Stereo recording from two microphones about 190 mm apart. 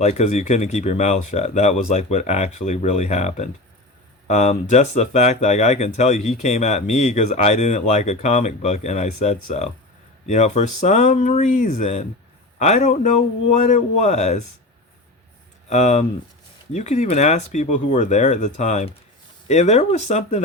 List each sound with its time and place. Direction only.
0.0 s speech: 35° left (ahead or behind)
15.7 s speech: 35° left (ahead or behind)